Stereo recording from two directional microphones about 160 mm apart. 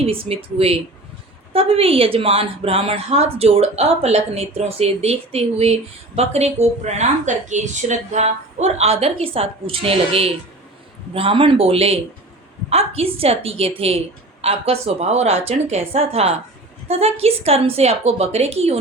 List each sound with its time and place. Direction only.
0.0 s a woman's voice: 35° right (ahead or behind)